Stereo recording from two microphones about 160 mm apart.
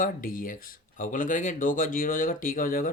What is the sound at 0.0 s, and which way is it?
Speech, 60° left (ahead or behind).